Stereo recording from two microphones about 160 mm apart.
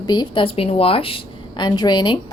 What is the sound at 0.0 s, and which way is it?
A woman's voice, 25° left (ahead or behind).